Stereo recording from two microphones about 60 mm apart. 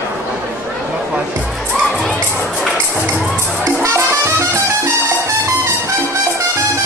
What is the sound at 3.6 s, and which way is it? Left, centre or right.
Music, right.